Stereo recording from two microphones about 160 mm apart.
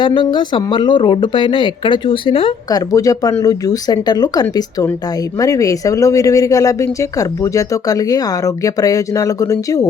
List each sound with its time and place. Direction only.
0.0 s speech: 30° left (ahead or behind)
2.6 s speech: 20° left (ahead or behind)